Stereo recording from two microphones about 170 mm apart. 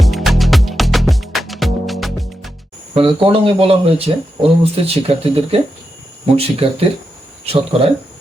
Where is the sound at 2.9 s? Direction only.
35° right (ahead or behind).